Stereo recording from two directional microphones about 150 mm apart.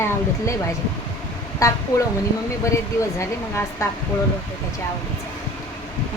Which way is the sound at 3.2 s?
20° left (ahead or behind).